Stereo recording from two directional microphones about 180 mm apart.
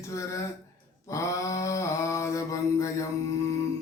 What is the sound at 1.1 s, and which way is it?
Mantra, 15° left (ahead or behind).